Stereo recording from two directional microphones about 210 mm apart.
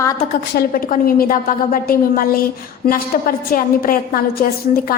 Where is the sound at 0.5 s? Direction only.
45° left (ahead or behind).